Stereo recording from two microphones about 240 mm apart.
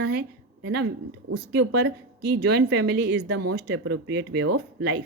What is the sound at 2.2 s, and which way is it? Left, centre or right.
A woman's voice, right.